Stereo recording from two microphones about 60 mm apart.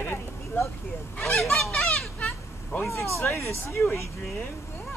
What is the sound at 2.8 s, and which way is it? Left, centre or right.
Speech, left.